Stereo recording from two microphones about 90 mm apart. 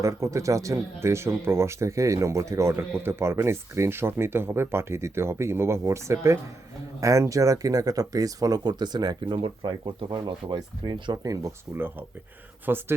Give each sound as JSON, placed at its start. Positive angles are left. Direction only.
{"t": 0.0, "sound": "speech", "side_deg": -35}
{"t": 11.2, "sound": "speech", "side_deg": -40}
{"t": 11.7, "sound": "speech", "side_deg": -25}